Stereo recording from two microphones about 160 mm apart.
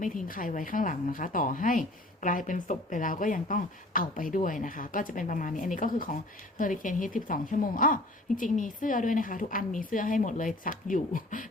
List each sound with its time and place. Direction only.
0.0 s speech: 60° left (ahead or behind)